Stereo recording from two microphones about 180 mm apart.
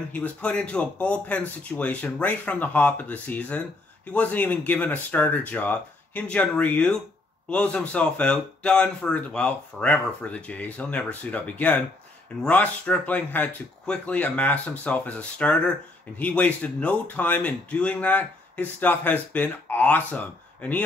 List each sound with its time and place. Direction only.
0.1 s speech: 10° left (ahead or behind)